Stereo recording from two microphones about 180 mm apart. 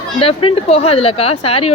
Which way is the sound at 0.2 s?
30° left (ahead or behind).